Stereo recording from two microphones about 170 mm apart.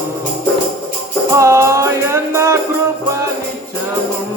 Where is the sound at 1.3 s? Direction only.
15° right (ahead or behind).